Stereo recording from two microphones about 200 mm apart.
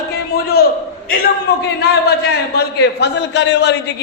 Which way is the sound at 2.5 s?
55° left (ahead or behind).